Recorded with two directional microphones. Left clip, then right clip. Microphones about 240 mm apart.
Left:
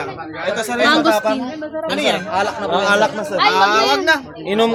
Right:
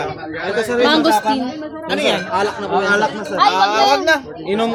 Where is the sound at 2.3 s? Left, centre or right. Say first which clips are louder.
Even; left.